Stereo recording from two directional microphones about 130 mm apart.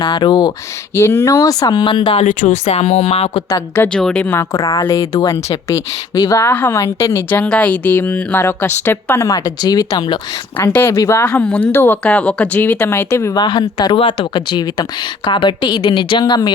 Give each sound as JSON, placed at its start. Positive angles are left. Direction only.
{"t": 0.0, "sound": "speech", "side_deg": 35}
{"t": 0.9, "sound": "a woman's voice", "side_deg": 20}
{"t": 2.1, "sound": "speech", "side_deg": 70}
{"t": 3.8, "sound": "a woman's voice", "side_deg": 5}
{"t": 4.3, "sound": "a woman's voice", "side_deg": 25}
{"t": 10.7, "sound": "a woman's voice", "side_deg": 15}
{"t": 11.3, "sound": "a woman's voice", "side_deg": 10}
{"t": 13.4, "sound": "speech", "side_deg": 35}